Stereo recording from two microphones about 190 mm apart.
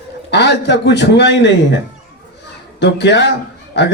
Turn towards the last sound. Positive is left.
turn(degrees=65)  # may be behind; listen again after turning